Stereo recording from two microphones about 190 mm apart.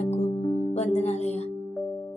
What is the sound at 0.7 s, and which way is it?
Music, 35° left (ahead or behind).